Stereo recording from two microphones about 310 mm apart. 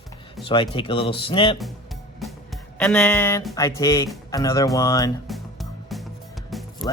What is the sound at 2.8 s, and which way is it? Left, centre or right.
Speech, centre.